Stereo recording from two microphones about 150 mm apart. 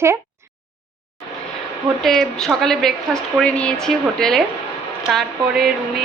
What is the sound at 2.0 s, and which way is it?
A woman's voice, centre (ahead or behind).